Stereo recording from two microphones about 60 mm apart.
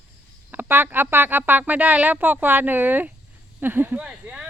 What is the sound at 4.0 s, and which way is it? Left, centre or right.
Speech, centre.